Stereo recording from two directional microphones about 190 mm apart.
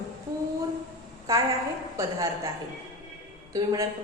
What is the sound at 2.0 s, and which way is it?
Speech, 15° right (ahead or behind).